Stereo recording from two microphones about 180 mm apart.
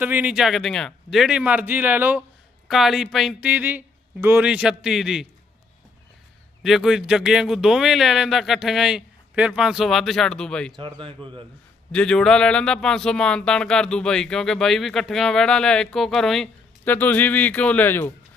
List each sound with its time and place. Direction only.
0.0 s a man's voice: 10° right (ahead or behind)
6.6 s speech: centre (ahead or behind)
10.8 s speech: 30° right (ahead or behind)
11.9 s speech: 5° left (ahead or behind)